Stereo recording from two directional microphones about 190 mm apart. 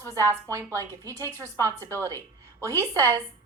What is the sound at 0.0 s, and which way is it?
A woman's voice, 15° right (ahead or behind).